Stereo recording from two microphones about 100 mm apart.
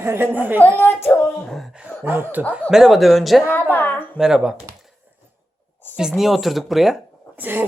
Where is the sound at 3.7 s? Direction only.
20° left (ahead or behind).